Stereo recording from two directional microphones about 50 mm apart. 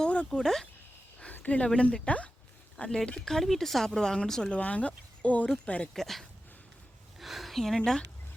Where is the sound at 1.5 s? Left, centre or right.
Left.